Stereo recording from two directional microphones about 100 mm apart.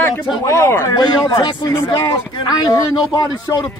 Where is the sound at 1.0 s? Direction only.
50° left (ahead or behind).